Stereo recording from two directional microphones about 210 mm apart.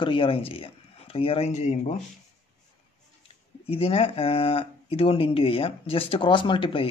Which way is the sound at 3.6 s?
25° left (ahead or behind).